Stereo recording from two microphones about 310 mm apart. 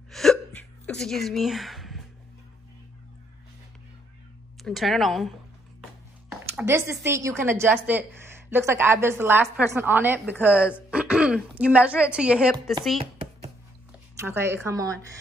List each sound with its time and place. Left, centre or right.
0.1 s hiccup: centre
4.6 s speech: centre
6.5 s a woman's voice: centre
13.0 s a sound: centre
14.2 s a woman's voice: centre